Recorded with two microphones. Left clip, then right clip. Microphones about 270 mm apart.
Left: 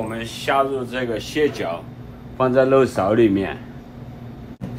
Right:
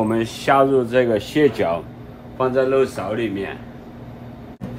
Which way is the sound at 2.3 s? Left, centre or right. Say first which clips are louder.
Left 2 dB; centre.